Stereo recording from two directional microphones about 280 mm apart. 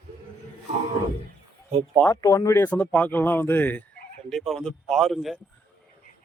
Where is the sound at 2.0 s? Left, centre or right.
Centre.